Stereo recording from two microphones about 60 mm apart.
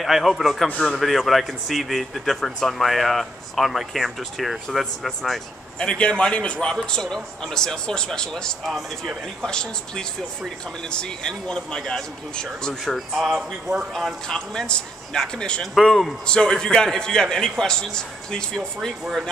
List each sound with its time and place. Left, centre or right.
0.0 s a man's voice: centre
5.8 s a man's voice: centre
14.2 s a man's voice: centre
15.6 s a man's voice: centre
16.3 s a man's voice: centre